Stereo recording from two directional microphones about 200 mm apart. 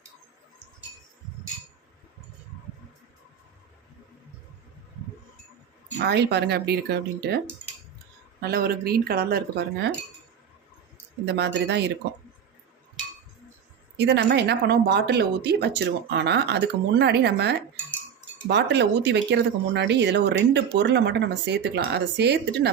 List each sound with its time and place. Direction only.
6.0 s speech: 55° right (ahead or behind)
11.3 s speech: 60° right (ahead or behind)
13.9 s speech: 55° right (ahead or behind)